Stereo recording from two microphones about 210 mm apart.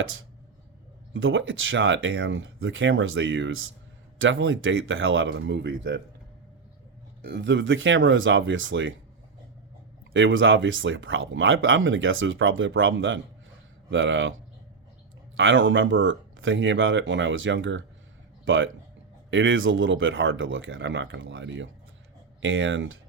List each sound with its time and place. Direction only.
1.1 s speech: 65° right (ahead or behind)
7.3 s speech: 55° right (ahead or behind)
10.1 s speech: 65° right (ahead or behind)
15.4 s speech: 65° right (ahead or behind)